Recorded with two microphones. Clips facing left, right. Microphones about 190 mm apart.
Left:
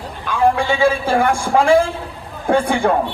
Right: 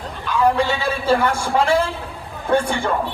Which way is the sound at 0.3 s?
50° left (ahead or behind).